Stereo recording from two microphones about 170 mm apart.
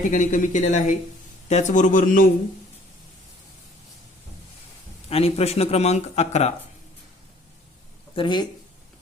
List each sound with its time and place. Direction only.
0.1 s speech: 50° left (ahead or behind)
5.0 s speech: 35° left (ahead or behind)
8.1 s speech: 30° left (ahead or behind)